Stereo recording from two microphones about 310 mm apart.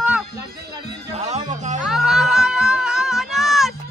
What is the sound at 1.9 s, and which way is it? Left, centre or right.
Music, centre.